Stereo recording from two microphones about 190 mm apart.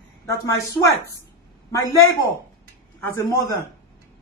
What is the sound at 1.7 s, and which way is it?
Speech, 15° left (ahead or behind).